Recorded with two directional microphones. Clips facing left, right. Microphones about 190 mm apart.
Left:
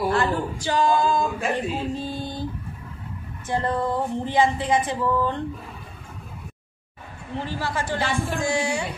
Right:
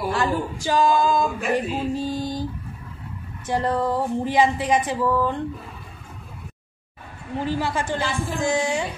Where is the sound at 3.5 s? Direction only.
15° right (ahead or behind).